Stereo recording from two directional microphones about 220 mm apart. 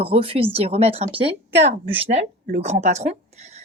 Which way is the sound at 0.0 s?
25° right (ahead or behind).